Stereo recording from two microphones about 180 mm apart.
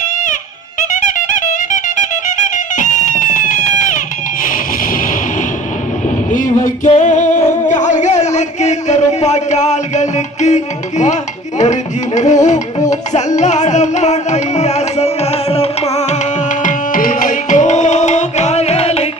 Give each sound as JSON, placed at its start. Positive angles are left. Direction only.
{"t": 0.8, "sound": "music", "side_deg": 45}
{"t": 6.3, "sound": "music", "side_deg": 50}
{"t": 7.7, "sound": "a sound", "side_deg": 40}
{"t": 12.9, "sound": "music", "side_deg": 40}